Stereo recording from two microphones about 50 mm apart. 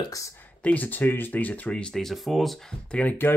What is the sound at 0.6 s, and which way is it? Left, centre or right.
Speech, left.